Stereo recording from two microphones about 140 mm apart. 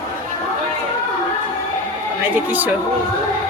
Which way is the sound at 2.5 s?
10° right (ahead or behind).